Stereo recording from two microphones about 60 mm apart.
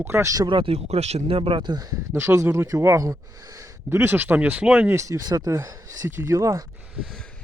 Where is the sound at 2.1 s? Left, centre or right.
Right.